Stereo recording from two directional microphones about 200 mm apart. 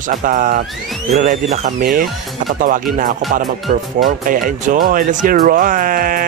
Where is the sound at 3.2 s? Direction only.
Centre (ahead or behind).